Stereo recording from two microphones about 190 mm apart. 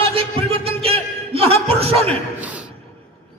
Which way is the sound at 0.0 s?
30° right (ahead or behind).